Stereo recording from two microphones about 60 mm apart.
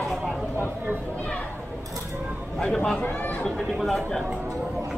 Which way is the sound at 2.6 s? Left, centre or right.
Centre.